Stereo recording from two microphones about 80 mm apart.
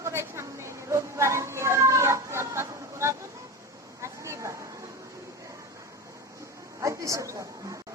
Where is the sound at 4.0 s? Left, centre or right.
Right.